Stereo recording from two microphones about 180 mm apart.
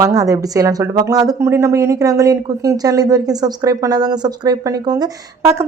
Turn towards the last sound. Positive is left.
turn(degrees=-20)  # may be behind; listen again after turning